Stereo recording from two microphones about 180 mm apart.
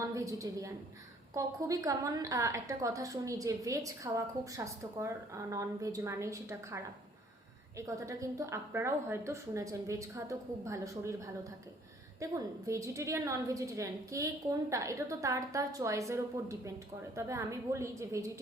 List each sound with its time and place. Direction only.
0.0 s a woman's voice: 15° right (ahead or behind)